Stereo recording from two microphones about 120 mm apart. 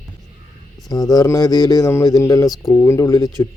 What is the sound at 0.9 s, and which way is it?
Speech, 30° left (ahead or behind).